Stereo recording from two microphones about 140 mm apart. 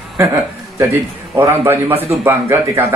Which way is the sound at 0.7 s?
20° right (ahead or behind).